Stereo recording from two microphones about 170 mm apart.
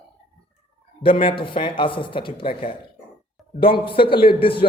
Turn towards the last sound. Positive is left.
turn(degrees=30)  # may be behind; listen again after turning